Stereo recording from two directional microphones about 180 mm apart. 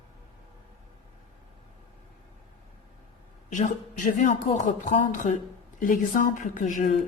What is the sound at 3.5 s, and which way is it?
Speech, 45° left (ahead or behind).